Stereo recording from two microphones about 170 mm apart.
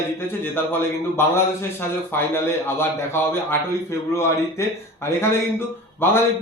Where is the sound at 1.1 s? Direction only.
15° left (ahead or behind).